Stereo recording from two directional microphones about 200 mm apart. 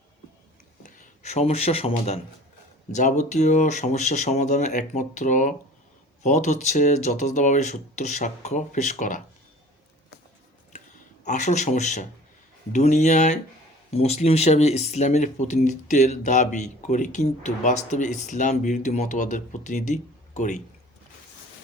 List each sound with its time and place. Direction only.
0.8 s speech: 40° left (ahead or behind)
11.3 s speech: 35° left (ahead or behind)